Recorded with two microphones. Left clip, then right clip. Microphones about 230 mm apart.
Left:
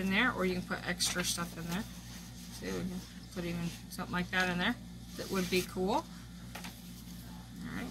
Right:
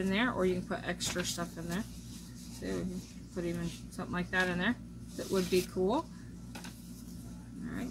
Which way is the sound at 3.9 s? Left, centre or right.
Left.